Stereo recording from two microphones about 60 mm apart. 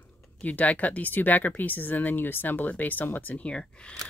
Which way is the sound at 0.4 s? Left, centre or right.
Left.